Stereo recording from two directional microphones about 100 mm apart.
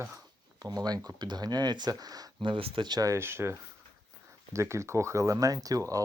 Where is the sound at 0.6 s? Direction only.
45° right (ahead or behind).